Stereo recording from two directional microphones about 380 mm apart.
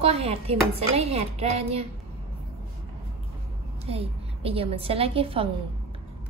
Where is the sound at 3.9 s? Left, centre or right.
Centre.